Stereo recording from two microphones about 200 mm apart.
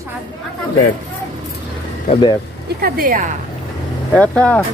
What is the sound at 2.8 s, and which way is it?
Speech, 45° right (ahead or behind).